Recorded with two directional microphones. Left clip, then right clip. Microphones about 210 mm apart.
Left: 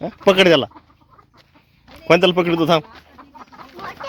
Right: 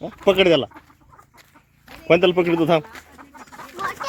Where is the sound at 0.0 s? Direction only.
25° left (ahead or behind).